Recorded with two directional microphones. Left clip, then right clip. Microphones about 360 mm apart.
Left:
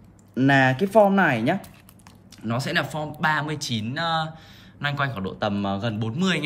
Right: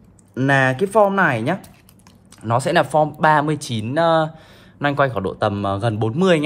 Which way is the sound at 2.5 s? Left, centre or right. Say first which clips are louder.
Right 9 dB; centre.